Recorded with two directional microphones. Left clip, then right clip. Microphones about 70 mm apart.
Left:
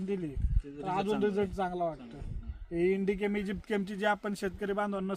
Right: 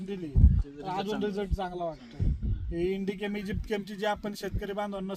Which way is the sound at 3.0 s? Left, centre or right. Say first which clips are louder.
Left 2 dB; right.